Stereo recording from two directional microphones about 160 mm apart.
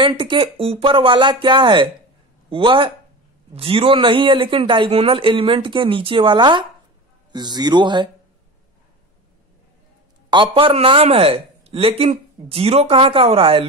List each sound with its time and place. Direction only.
0.0 s a man's voice: 30° right (ahead or behind)
10.3 s speech: 30° right (ahead or behind)